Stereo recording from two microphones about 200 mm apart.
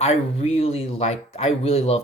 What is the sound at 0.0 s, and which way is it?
Speech, 30° left (ahead or behind).